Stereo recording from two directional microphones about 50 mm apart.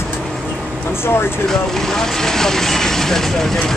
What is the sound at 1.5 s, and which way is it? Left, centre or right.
Speech, centre.